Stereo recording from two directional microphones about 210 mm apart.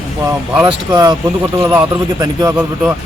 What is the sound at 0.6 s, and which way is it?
Speech, 15° right (ahead or behind).